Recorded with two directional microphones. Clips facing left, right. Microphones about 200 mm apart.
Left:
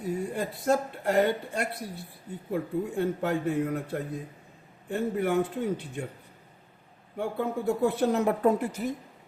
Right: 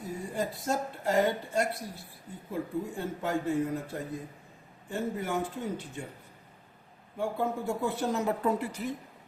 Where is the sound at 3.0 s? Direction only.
60° left (ahead or behind).